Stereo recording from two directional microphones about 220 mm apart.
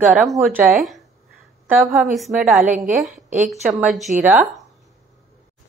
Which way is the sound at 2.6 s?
35° right (ahead or behind).